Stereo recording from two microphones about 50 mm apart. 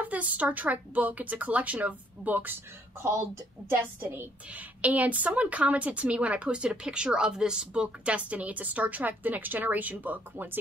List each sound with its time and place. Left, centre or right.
0.0 s a woman's voice: right